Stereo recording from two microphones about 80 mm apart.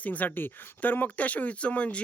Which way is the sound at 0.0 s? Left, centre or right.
Centre.